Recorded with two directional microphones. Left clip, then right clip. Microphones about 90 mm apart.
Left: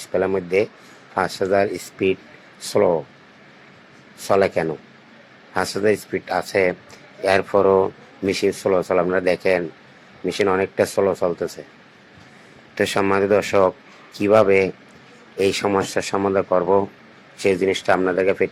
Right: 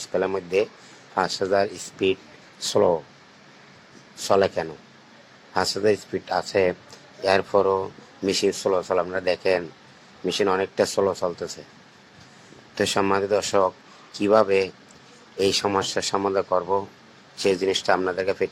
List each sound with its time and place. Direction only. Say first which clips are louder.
0.0 s speech: left 4 dB; 30° left (ahead or behind)
4.2 s speech: left 3 dB; 30° left (ahead or behind)
12.7 s speech: left 3 dB; 30° left (ahead or behind)